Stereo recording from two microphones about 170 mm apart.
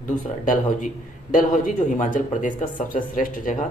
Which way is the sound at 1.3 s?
50° left (ahead or behind).